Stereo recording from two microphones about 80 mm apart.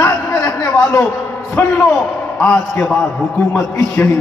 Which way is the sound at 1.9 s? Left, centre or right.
Centre.